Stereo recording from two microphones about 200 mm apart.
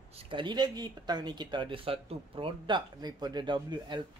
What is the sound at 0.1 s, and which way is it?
Speech, 25° right (ahead or behind).